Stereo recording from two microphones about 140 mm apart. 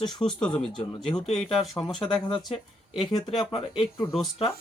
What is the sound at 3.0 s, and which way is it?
Speech, 40° left (ahead or behind).